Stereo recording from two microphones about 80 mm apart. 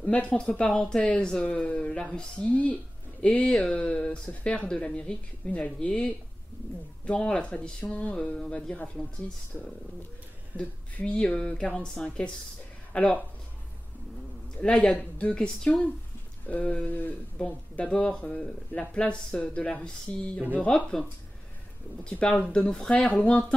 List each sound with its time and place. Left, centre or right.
0.0 s speech: centre
10.6 s speech: centre
14.6 s speech: centre
22.2 s speech: centre